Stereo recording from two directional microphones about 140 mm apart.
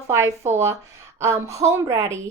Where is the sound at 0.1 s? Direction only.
20° right (ahead or behind).